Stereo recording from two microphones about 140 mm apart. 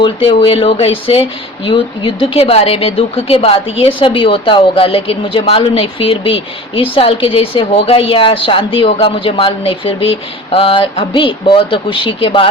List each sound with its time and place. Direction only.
0.0 s speech: 40° left (ahead or behind)